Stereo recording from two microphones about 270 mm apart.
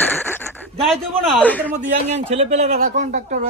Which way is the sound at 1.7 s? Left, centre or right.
Right.